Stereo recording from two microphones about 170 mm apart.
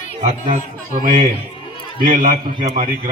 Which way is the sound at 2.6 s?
45° right (ahead or behind).